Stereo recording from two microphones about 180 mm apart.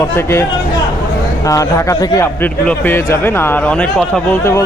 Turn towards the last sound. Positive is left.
turn(degrees=15)  # may be behind; listen again after turning